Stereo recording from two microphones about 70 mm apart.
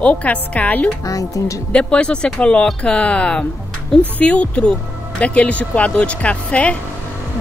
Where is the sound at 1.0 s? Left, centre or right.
Left.